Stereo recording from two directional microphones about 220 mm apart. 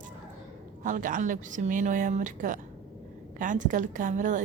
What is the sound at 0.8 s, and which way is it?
A woman's voice, 35° right (ahead or behind).